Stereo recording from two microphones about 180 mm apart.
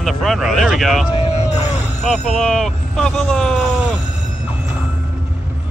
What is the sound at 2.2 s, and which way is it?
Speech, 5° left (ahead or behind).